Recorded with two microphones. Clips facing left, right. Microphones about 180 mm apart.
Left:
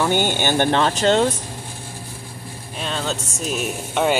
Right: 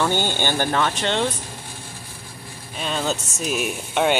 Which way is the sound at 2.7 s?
5° right (ahead or behind).